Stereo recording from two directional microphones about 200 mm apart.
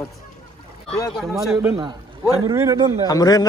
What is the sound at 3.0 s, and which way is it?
Speech, 20° left (ahead or behind).